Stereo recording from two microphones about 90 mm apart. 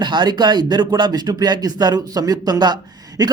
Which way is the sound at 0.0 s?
55° right (ahead or behind).